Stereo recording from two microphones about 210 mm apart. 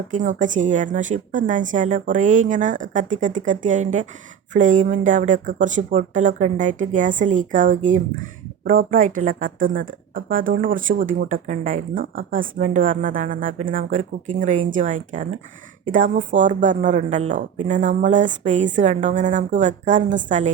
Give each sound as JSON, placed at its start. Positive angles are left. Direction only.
{"t": 0.1, "sound": "speech", "side_deg": -35}